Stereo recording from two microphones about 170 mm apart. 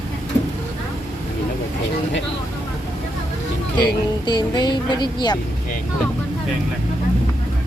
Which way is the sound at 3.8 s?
25° left (ahead or behind).